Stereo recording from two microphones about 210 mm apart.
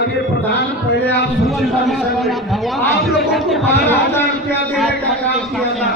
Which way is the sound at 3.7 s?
10° left (ahead or behind).